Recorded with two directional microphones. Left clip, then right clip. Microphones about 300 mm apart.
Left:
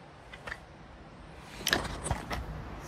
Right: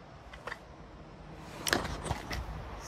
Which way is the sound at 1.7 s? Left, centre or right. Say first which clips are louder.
Left 1 dB; right.